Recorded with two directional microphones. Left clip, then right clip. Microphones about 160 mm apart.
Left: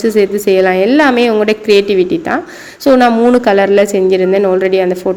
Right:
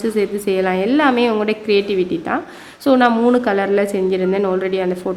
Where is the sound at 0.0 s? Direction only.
20° left (ahead or behind).